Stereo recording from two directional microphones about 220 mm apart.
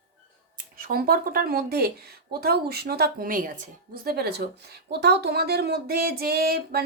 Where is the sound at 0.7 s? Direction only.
40° right (ahead or behind).